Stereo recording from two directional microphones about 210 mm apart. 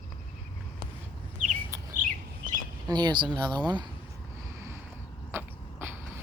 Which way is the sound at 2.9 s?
20° right (ahead or behind).